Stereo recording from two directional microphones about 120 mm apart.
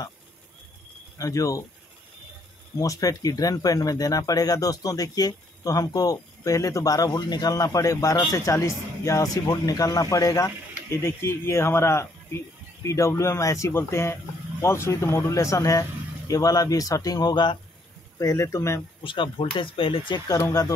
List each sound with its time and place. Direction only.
1.1 s speech: 25° left (ahead or behind)
2.8 s speech: 30° left (ahead or behind)
18.2 s speech: 25° left (ahead or behind)
19.0 s speech: 45° left (ahead or behind)
20.2 s speech: 30° left (ahead or behind)